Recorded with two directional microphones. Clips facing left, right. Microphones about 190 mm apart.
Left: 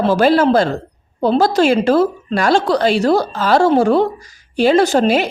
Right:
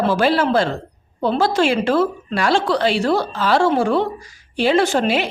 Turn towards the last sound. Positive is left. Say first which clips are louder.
# left 4 dB
turn(degrees=40)  # may be behind; listen again after turning